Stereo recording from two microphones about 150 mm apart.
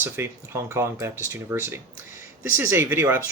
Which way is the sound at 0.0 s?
15° right (ahead or behind).